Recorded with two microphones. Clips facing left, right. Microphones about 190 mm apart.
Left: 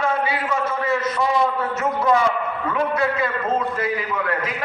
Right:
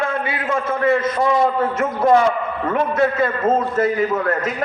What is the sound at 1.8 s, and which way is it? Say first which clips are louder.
A man's voice: right 4 dB; 50° right (ahead or behind).